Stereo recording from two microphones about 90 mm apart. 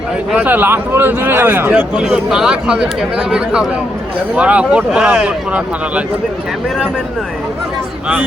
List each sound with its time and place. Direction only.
0.3 s a man's voice: 20° right (ahead or behind)
1.7 s speech: 10° right (ahead or behind)